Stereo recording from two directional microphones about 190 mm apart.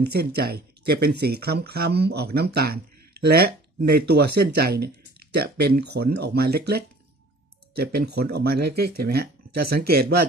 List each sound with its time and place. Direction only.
0.0 s speech: 55° right (ahead or behind)